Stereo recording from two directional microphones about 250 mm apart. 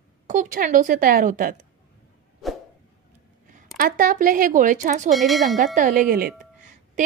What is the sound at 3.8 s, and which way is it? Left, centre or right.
A woman's voice, right.